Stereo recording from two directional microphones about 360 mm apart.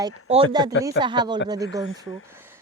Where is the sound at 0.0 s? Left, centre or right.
Centre.